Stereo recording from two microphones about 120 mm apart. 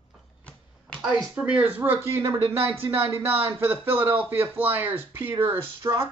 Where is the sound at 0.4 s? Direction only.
10° left (ahead or behind).